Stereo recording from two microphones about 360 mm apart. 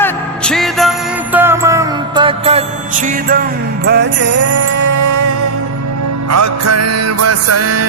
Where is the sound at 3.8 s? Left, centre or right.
Right.